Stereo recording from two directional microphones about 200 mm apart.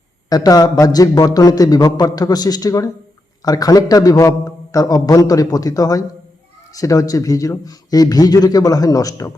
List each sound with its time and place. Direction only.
0.3 s a man's voice: 20° left (ahead or behind)